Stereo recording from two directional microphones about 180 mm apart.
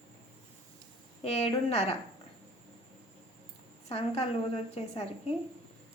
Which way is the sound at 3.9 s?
35° left (ahead or behind).